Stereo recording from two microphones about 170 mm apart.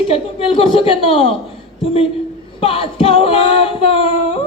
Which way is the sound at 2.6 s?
30° left (ahead or behind).